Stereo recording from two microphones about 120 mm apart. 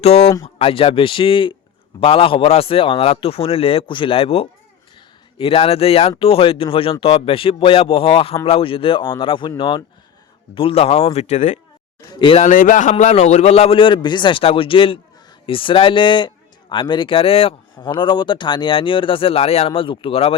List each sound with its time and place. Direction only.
0.0 s a man's voice: 55° left (ahead or behind); by 11.6 s 80° left
12.1 s speech: 45° left (ahead or behind)
12.4 s speech: 90° left; by 20.3 s 50° left (ahead or behind)